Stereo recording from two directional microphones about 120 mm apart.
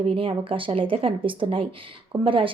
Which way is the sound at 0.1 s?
50° right (ahead or behind).